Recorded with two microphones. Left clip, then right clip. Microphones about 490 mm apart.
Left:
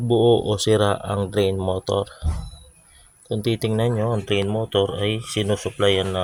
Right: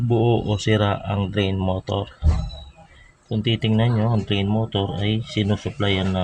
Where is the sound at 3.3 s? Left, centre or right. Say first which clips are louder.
Even; left.